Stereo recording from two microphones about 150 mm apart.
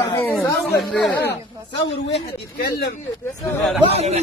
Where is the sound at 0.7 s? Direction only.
Centre (ahead or behind).